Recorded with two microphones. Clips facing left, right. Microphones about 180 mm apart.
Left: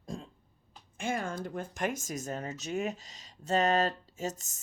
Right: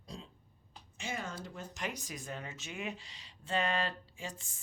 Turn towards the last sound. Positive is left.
turn(degrees=40)  # may be behind; listen again after turning